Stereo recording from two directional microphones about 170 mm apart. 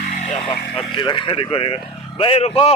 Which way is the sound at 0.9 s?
30° left (ahead or behind).